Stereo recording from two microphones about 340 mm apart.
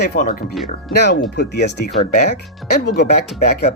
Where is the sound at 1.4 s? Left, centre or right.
Left.